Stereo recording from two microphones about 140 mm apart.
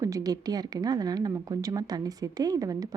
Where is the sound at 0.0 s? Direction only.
25° right (ahead or behind).